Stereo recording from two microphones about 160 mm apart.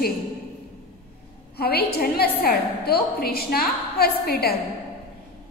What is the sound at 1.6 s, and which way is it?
A woman's voice, 75° left (ahead or behind).